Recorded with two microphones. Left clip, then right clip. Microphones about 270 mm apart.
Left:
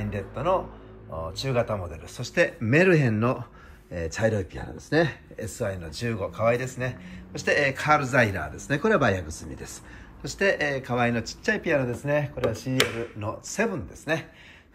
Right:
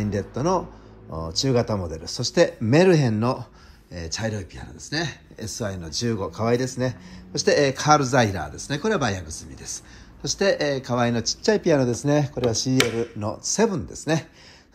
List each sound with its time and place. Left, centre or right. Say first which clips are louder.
0.1 s speech: right 1 dB; centre
5.6 s speech: right 2 dB; centre
10.2 s speech: right 3 dB; centre